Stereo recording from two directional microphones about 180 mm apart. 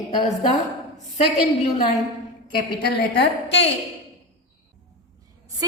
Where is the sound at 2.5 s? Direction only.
60° left (ahead or behind).